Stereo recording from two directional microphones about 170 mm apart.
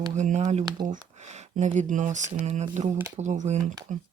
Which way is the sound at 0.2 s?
45° right (ahead or behind).